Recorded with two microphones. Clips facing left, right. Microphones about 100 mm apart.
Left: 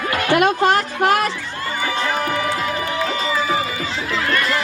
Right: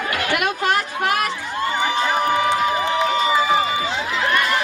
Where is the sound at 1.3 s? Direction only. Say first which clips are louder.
Right 3 dB; 20° right (ahead or behind).